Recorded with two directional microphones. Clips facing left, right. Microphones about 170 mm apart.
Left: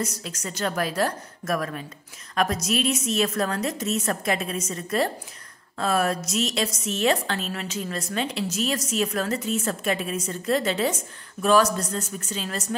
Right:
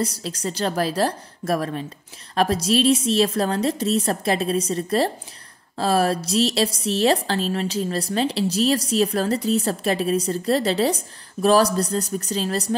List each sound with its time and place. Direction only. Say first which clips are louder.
0.0 s a woman's voice: right 5 dB; 30° right (ahead or behind)